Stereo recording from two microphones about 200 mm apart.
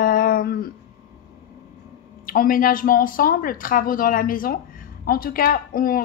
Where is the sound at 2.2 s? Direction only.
45° left (ahead or behind).